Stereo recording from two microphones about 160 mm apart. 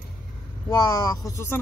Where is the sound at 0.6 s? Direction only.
25° left (ahead or behind).